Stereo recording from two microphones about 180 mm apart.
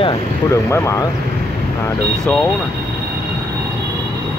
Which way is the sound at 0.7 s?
15° left (ahead or behind).